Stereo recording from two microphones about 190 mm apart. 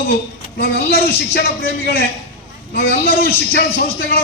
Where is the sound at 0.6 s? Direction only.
55° left (ahead or behind).